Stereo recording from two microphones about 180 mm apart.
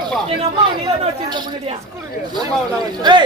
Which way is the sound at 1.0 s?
30° right (ahead or behind).